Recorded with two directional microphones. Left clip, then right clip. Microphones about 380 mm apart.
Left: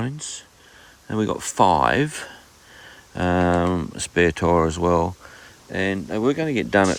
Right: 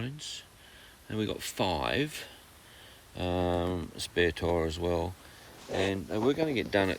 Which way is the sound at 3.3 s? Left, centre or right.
Left.